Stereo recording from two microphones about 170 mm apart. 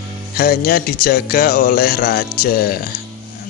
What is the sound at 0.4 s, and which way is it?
Speech, 65° left (ahead or behind).